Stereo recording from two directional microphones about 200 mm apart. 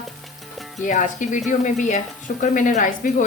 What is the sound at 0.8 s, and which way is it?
A woman's voice, 40° left (ahead or behind).